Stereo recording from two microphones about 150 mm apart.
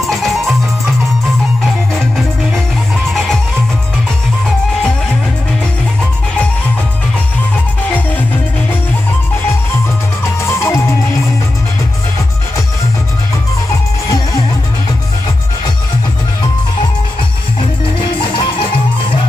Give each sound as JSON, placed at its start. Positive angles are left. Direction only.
{"t": 0.0, "sound": "music", "side_deg": 0}
{"t": 10.4, "sound": "music", "side_deg": 20}
{"t": 18.1, "sound": "music", "side_deg": 35}